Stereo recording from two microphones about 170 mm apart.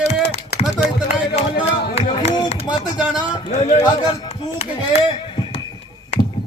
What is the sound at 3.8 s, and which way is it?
Speech, 25° left (ahead or behind).